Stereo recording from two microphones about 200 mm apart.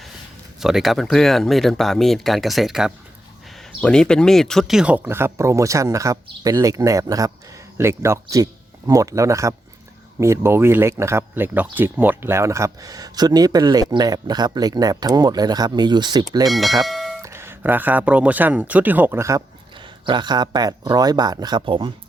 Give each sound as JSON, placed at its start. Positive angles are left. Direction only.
{"t": 0.6, "sound": "speech", "side_deg": 0}
{"t": 16.5, "sound": "speech", "side_deg": 0}
{"t": 17.2, "sound": "speech", "side_deg": -10}
{"t": 19.8, "sound": "speech", "side_deg": -25}